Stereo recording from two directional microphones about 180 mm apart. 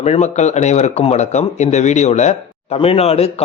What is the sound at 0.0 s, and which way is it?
A man's voice, 40° left (ahead or behind).